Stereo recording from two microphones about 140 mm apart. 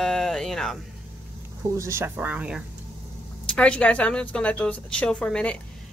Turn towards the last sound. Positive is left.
turn(degrees=5)  # may be behind; listen again after turning